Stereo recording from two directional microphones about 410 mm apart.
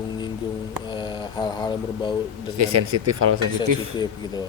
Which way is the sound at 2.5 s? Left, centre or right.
Right.